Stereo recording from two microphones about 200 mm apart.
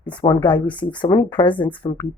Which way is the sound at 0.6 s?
5° left (ahead or behind).